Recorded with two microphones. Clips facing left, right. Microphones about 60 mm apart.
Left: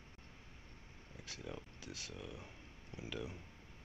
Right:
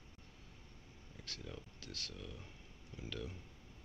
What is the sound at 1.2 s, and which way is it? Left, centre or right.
Speech, centre.